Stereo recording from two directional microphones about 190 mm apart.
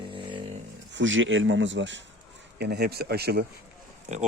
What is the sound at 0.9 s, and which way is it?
Speech, 85° right.